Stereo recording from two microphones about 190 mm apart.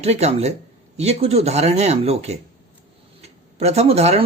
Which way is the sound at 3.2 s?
35° right (ahead or behind).